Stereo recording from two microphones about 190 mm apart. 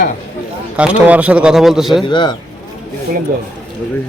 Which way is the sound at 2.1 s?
25° left (ahead or behind).